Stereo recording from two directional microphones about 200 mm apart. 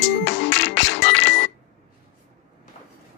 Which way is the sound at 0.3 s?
60° left (ahead or behind).